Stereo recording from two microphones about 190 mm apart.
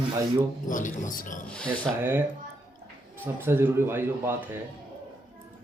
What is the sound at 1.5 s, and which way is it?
Speech, 5° left (ahead or behind).